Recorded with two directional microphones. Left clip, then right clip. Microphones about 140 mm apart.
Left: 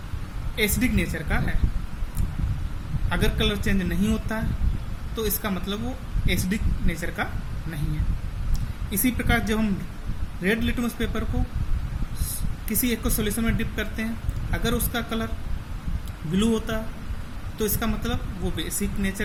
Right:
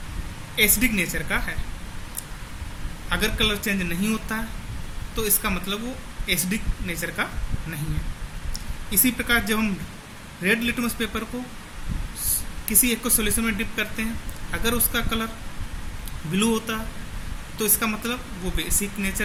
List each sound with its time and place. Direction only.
0.5 s speech: 20° left (ahead or behind)
3.1 s speech: 20° left (ahead or behind)
8.5 s speech: 20° left (ahead or behind)
12.6 s speech: 20° left (ahead or behind)
16.3 s speech: 20° left (ahead or behind)